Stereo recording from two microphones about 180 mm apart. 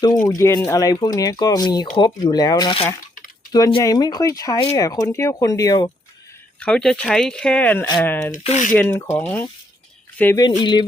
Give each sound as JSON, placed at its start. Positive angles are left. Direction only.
{"t": 0.3, "sound": "speech", "side_deg": 15}
{"t": 6.6, "sound": "speech", "side_deg": 5}
{"t": 8.3, "sound": "speech", "side_deg": 45}
{"t": 8.7, "sound": "speech", "side_deg": 10}
{"t": 10.6, "sound": "speech", "side_deg": 25}